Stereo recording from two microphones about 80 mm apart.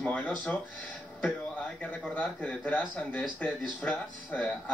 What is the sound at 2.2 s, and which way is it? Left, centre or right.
Speech, centre.